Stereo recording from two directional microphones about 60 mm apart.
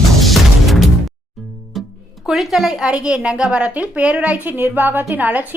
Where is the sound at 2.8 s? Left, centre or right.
Centre.